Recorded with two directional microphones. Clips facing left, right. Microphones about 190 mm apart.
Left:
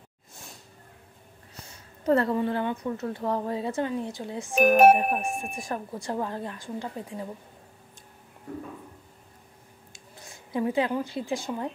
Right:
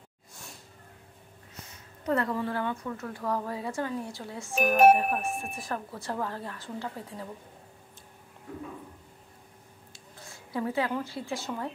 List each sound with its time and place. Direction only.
2.0 s a woman's voice: 30° left (ahead or behind)
4.6 s speech: 55° left (ahead or behind)
4.9 s a woman's voice: 15° left (ahead or behind)
9.9 s a woman's voice: 15° left (ahead or behind)